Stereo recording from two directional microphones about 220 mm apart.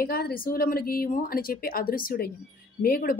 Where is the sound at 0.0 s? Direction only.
40° left (ahead or behind).